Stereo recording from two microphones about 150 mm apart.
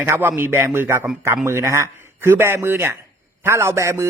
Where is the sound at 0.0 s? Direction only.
15° right (ahead or behind).